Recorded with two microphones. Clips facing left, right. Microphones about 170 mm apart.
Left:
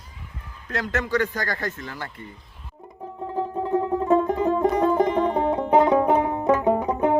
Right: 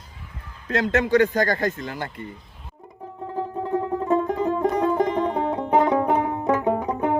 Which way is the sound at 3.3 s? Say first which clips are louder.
Left 2 dB; 20° left (ahead or behind).